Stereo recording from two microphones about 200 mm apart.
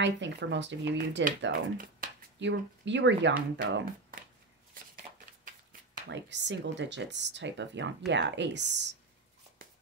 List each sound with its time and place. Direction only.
0.0 s speech: 65° right (ahead or behind)
1.4 s speech: 45° right (ahead or behind)
2.4 s speech: 65° right (ahead or behind)
4.9 s a sound: 45° right (ahead or behind)
6.1 s speech: 65° right (ahead or behind)
9.6 s shuffling cards: 45° right (ahead or behind)